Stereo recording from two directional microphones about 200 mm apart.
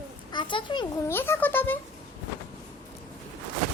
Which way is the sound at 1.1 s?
10° left (ahead or behind).